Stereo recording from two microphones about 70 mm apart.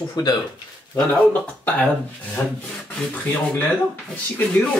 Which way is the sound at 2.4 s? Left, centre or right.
Left.